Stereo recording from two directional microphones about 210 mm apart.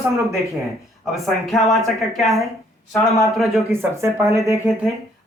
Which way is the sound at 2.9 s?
15° left (ahead or behind).